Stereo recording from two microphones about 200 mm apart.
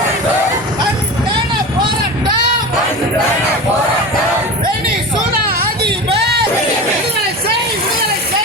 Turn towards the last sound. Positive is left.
turn(degrees=-55)  # may be behind; listen again after turning